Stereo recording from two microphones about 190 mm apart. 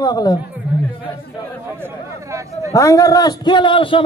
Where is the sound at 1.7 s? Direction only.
15° right (ahead or behind).